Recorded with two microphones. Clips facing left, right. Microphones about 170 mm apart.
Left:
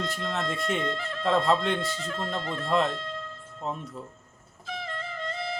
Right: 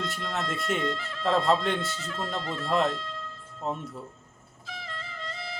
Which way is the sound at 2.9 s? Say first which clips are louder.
Left 1 dB; 55° left (ahead or behind).